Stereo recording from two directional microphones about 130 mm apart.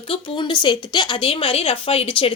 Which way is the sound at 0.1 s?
40° left (ahead or behind).